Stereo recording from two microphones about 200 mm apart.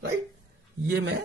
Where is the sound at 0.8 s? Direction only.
55° right (ahead or behind).